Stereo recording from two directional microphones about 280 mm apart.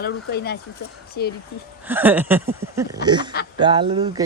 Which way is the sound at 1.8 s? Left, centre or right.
Centre.